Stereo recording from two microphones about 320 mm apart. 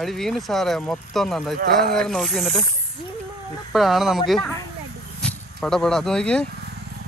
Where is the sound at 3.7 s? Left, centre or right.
Centre.